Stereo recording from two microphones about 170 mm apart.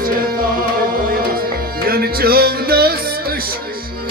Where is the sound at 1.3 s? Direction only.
60° right (ahead or behind).